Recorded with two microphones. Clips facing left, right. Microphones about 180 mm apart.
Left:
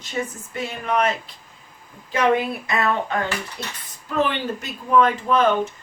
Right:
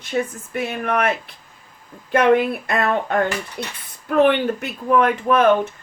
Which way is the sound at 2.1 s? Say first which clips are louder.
Right 4 dB; 55° right (ahead or behind).